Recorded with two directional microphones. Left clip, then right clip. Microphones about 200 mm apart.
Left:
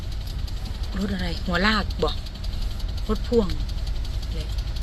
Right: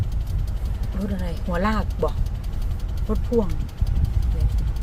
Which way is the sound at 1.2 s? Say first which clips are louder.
Left 2 dB; centre (ahead or behind).